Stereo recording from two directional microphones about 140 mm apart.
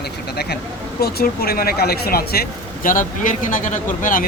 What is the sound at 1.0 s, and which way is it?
Speech, 90° left.